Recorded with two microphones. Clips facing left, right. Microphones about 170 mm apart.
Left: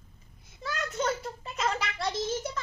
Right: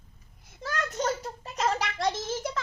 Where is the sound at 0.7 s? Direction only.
40° right (ahead or behind).